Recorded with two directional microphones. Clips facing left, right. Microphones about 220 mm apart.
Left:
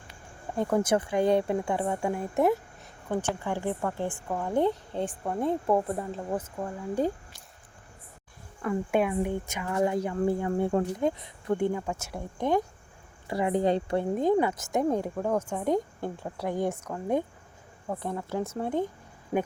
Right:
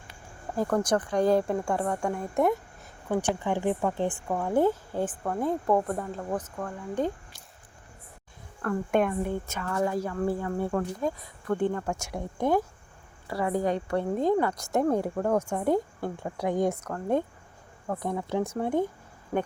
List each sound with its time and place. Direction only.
0.5 s a woman's voice: centre (ahead or behind)
3.1 s speech: 15° right (ahead or behind)
4.3 s a woman's voice: 5° right (ahead or behind)
5.2 s speech: 10° left (ahead or behind)
8.6 s a woman's voice: 5° left (ahead or behind)
11.5 s speech: 10° left (ahead or behind)
11.9 s speech: 15° right (ahead or behind)
13.2 s a woman's voice: 20° left (ahead or behind)
14.6 s a woman's voice: centre (ahead or behind)
16.8 s speech: 10° left (ahead or behind)
18.0 s speech: 10° right (ahead or behind)
19.3 s speech: 15° left (ahead or behind)